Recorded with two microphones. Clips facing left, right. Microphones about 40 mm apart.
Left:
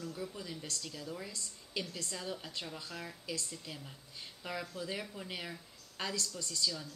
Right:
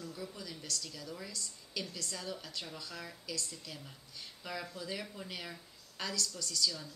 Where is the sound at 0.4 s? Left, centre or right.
Left.